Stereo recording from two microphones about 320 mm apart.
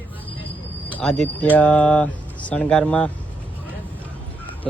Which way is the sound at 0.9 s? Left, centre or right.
Centre.